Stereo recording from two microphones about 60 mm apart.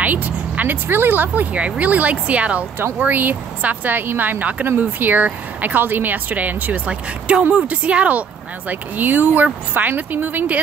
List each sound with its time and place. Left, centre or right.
0.0 s speech: right
3.0 s speech: right